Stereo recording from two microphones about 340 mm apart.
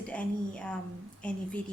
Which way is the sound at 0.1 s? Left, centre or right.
Centre.